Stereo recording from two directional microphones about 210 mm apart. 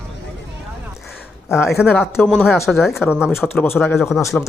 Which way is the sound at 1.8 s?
5° right (ahead or behind).